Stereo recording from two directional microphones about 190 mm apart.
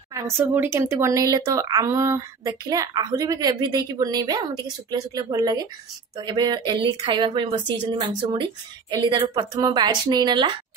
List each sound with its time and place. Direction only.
0.1 s speech: 15° right (ahead or behind)